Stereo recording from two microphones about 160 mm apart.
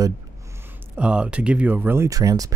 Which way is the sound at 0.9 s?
5° right (ahead or behind).